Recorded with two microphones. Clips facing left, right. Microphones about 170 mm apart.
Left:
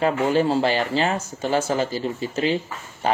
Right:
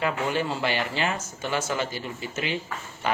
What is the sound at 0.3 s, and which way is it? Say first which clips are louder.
Speech: left 7 dB; 35° left (ahead or behind).